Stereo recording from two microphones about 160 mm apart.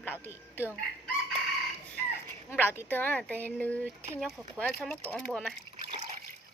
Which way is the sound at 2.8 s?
10° left (ahead or behind).